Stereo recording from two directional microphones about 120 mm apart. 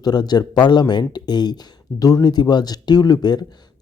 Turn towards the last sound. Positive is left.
turn(degrees=35)  # may be behind; listen again after turning